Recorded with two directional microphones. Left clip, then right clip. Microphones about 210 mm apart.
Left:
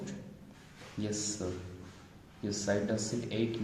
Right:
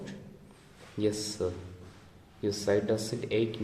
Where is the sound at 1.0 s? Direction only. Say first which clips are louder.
Right 7 dB; 45° right (ahead or behind).